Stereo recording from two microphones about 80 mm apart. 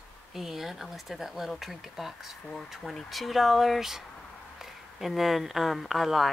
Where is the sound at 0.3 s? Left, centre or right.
Centre.